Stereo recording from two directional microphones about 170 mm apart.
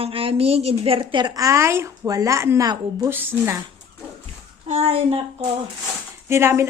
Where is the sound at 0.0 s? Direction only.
35° right (ahead or behind); by 3.6 s 10° right (ahead or behind).